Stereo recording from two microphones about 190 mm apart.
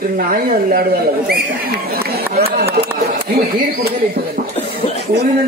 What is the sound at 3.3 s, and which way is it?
Speech, 55° right (ahead or behind).